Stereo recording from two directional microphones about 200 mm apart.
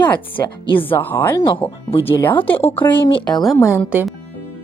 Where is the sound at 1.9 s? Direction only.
25° left (ahead or behind).